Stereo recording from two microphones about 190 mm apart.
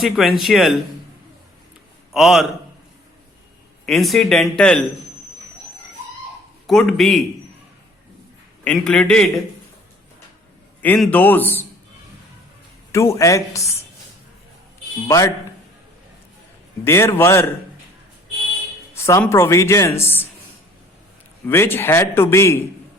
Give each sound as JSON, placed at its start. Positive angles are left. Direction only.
{"t": 0.0, "sound": "speech", "side_deg": 0}
{"t": 2.1, "sound": "speech", "side_deg": 0}
{"t": 3.8, "sound": "speech", "side_deg": 0}
{"t": 6.7, "sound": "speech", "side_deg": 0}
{"t": 8.6, "sound": "speech", "side_deg": 5}
{"t": 10.8, "sound": "speech", "side_deg": 5}
{"t": 12.9, "sound": "speech", "side_deg": 15}
{"t": 15.0, "sound": "speech", "side_deg": 15}
{"t": 16.8, "sound": "speech", "side_deg": 15}
{"t": 18.9, "sound": "speech", "side_deg": 15}
{"t": 21.4, "sound": "speech", "side_deg": 10}